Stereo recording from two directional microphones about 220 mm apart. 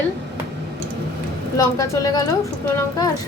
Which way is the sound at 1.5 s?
15° left (ahead or behind).